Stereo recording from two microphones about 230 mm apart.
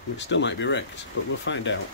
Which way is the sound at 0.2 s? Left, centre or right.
Left.